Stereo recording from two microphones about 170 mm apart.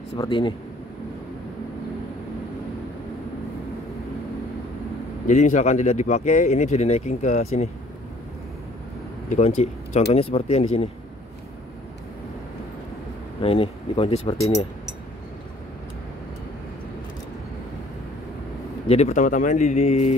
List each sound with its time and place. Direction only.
0.2 s speech: 30° left (ahead or behind)
5.2 s speech: 45° left (ahead or behind)
9.3 s speech: 40° left (ahead or behind)
13.4 s speech: 35° left (ahead or behind)
18.9 s speech: 40° left (ahead or behind)